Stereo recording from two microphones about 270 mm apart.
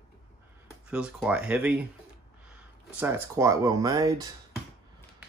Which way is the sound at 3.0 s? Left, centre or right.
Centre.